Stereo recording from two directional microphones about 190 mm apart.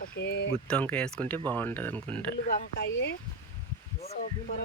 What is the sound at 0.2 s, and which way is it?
Speech, 60° left (ahead or behind).